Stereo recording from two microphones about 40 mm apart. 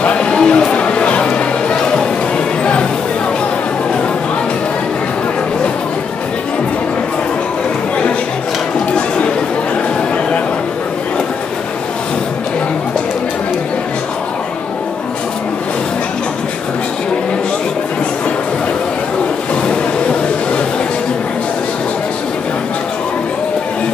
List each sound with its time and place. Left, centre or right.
0.0 s music: left